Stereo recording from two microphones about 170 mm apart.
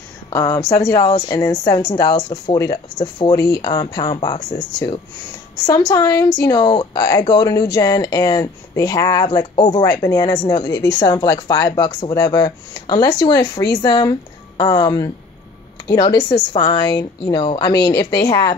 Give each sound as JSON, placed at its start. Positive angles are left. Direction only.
{"t": 0.3, "sound": "speech", "side_deg": 15}